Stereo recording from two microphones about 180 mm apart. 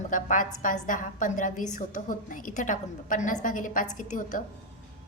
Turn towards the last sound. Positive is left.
turn(degrees=45)  # may be behind; listen again after turning